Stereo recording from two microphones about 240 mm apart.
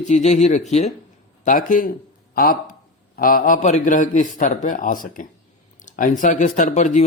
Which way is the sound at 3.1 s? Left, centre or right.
Left.